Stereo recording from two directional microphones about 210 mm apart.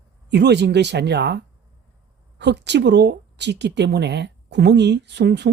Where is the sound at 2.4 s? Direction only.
55° right (ahead or behind).